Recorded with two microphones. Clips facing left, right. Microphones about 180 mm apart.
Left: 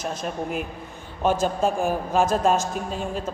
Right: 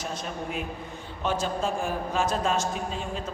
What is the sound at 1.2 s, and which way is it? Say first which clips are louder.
A woman's voice: left 6 dB; 45° left (ahead or behind).